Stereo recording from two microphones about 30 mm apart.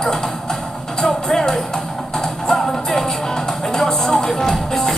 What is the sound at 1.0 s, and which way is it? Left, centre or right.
Music, centre.